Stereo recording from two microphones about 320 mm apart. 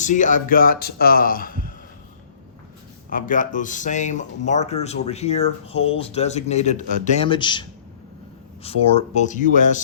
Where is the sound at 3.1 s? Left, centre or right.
Left.